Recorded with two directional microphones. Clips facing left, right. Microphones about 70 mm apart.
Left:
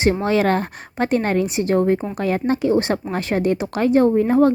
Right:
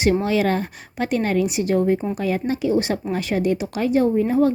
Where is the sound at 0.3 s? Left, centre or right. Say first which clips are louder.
Left 2 dB; left.